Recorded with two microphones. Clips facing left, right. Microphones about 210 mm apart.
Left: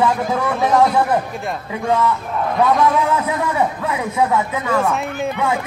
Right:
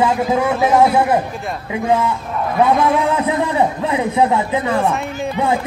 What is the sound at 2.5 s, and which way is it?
A man's voice, 15° right (ahead or behind).